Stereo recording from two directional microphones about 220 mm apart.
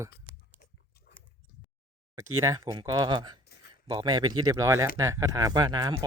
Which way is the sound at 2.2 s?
75° right (ahead or behind).